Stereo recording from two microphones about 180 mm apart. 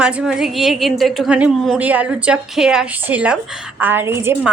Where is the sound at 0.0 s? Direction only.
5° right (ahead or behind).